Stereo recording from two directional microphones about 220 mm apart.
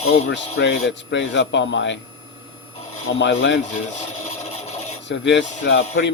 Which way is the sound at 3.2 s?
55° left (ahead or behind).